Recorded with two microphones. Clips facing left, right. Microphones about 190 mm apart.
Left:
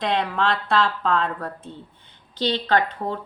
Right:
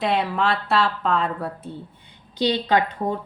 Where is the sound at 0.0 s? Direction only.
5° right (ahead or behind).